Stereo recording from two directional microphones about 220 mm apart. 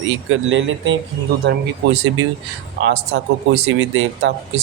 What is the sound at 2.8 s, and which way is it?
Speech, 80° right.